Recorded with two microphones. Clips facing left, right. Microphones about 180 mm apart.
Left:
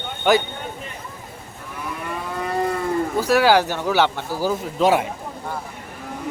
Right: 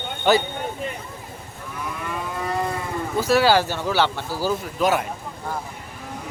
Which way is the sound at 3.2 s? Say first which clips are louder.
Even; 15° left (ahead or behind).